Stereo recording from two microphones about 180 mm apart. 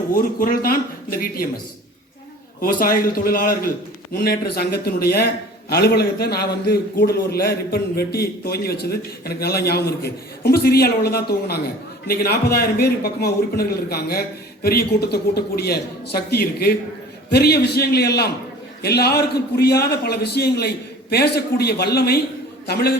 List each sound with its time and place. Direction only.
0.1 s speech: 50° left (ahead or behind)
2.6 s a man's voice: 50° left (ahead or behind)